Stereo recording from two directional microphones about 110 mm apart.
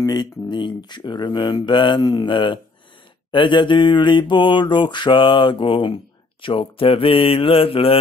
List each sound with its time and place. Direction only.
0.0 s mantra: 40° left (ahead or behind); by 8.0 s 60° left (ahead or behind)